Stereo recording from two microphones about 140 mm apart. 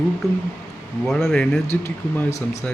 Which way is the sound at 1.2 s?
10° left (ahead or behind).